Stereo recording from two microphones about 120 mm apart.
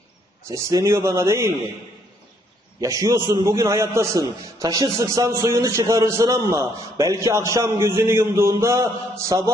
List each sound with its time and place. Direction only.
0.4 s a man's voice: 25° right (ahead or behind)
2.8 s a man's voice: 25° right (ahead or behind)